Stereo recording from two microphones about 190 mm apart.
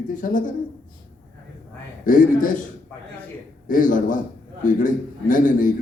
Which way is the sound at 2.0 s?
45° left (ahead or behind).